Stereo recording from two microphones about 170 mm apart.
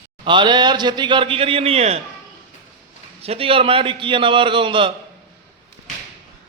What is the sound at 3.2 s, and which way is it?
A man's voice, 35° right (ahead or behind).